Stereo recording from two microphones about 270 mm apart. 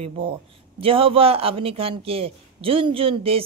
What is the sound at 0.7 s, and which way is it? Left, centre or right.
Speech, centre.